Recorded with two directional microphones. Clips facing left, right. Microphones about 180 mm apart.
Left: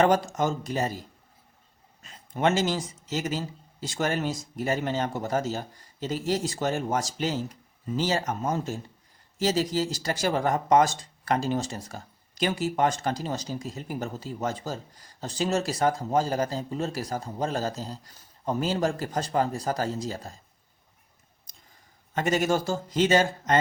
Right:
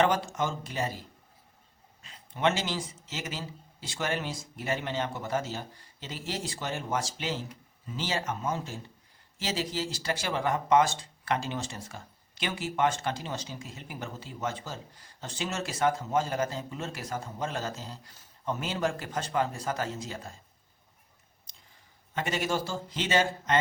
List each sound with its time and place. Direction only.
0.0 s speech: 40° left (ahead or behind)
22.1 s speech: 45° left (ahead or behind)